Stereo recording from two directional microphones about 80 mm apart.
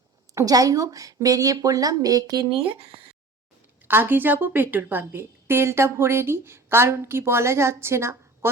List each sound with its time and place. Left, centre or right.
0.3 s a woman's voice: right
3.8 s a woman's voice: right